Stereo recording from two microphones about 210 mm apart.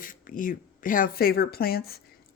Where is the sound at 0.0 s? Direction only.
40° left (ahead or behind).